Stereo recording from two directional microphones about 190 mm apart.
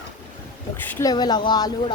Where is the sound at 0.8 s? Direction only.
20° left (ahead or behind).